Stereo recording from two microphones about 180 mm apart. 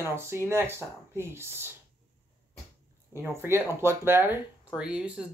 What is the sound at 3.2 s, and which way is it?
Speech, 15° right (ahead or behind).